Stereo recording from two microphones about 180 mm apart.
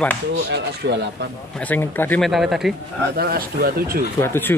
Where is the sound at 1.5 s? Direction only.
10° left (ahead or behind).